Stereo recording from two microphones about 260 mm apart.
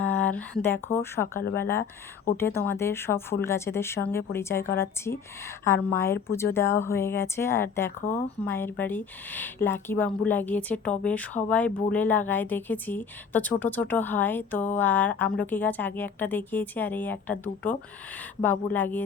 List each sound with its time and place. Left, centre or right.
0.0 s a woman's voice: centre